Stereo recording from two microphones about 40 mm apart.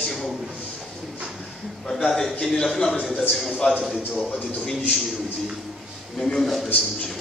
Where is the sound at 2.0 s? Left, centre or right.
Centre.